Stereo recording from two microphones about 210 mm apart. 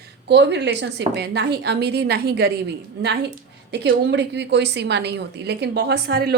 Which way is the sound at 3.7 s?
55° right (ahead or behind).